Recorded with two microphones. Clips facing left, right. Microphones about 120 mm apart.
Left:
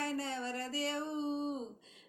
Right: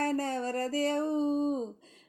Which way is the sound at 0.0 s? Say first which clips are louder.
Right 7 dB; 45° right (ahead or behind).